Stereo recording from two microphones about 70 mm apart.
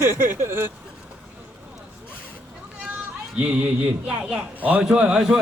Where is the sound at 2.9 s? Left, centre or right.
Right.